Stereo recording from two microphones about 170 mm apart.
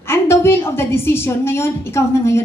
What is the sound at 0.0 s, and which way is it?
A woman's voice, 15° left (ahead or behind).